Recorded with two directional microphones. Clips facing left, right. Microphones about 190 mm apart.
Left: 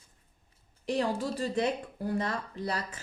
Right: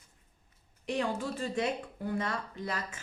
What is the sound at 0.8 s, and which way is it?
Speech, 35° left (ahead or behind).